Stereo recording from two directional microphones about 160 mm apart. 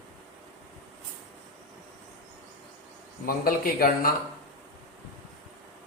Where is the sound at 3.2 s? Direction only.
65° left (ahead or behind).